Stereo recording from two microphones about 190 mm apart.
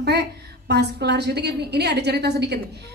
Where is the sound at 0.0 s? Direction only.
60° right (ahead or behind).